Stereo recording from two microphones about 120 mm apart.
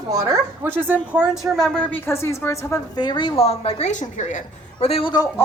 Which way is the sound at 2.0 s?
20° left (ahead or behind).